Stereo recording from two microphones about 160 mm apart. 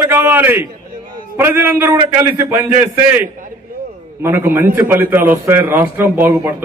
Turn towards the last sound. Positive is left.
turn(degrees=-15)  # may be behind; listen again after turning